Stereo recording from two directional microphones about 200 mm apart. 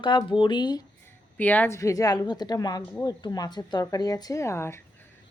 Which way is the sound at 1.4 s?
10° left (ahead or behind).